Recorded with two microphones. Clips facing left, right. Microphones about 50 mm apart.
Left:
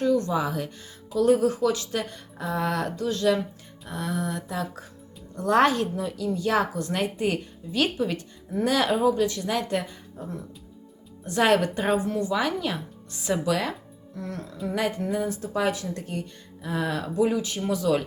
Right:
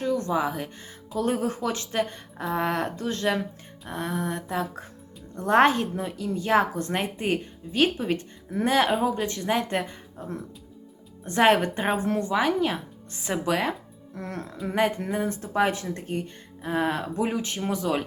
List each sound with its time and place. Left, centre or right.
0.0 s a woman's voice: right
11.3 s a woman's voice: right
11.9 s speech: right
12.3 s a woman's voice: right
14.2 s a woman's voice: right